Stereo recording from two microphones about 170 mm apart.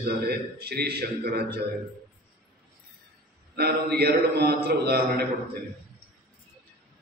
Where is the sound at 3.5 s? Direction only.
70° right (ahead or behind).